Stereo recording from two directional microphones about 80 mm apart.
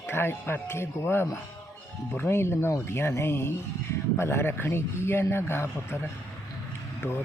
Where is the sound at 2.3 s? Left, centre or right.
Left.